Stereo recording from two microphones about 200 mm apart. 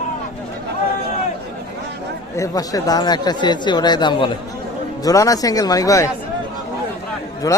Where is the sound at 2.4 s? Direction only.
20° left (ahead or behind).